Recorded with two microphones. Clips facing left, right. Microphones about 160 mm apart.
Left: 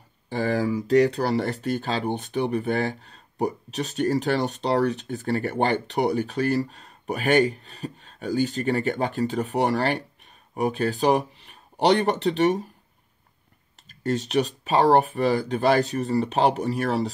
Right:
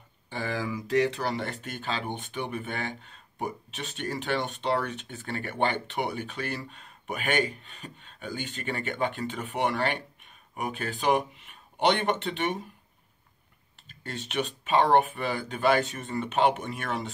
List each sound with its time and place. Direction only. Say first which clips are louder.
0.3 s speech: left 8 dB; 40° left (ahead or behind)
13.8 s speech: left 12 dB; 40° left (ahead or behind)